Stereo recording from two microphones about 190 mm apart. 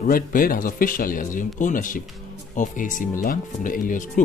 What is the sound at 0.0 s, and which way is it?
Speech, 45° left (ahead or behind).